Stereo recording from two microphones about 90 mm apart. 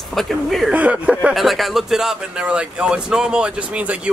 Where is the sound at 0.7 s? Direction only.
15° right (ahead or behind).